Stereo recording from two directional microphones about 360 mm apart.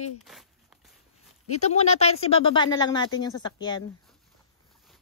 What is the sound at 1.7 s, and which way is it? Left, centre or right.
Speech, centre.